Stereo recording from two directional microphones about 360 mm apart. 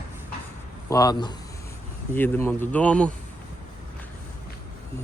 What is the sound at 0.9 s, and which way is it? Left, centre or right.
Speech, centre.